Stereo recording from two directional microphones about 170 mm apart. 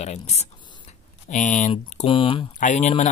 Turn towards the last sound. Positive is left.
turn(degrees=45)  # may be behind; listen again after turning